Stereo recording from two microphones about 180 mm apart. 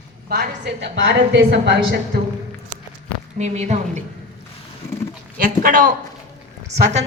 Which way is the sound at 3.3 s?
40° right (ahead or behind).